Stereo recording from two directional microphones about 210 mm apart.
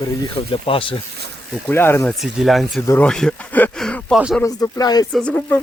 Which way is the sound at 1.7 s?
10° left (ahead or behind).